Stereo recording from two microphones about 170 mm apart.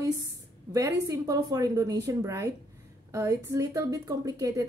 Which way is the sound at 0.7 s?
20° right (ahead or behind).